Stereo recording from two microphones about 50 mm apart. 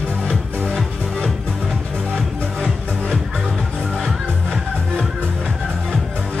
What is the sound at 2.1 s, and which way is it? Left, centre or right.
Music, centre.